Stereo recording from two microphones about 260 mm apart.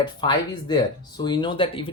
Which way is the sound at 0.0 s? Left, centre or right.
Centre.